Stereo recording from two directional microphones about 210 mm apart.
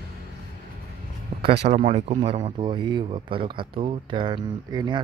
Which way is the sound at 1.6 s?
30° right (ahead or behind).